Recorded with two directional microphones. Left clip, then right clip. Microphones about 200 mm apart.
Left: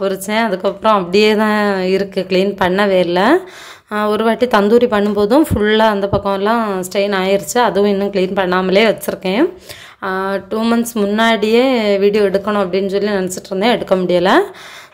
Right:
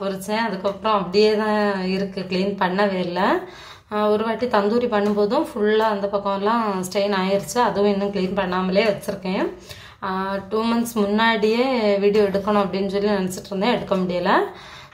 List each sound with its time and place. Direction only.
0.0 s speech: 35° left (ahead or behind)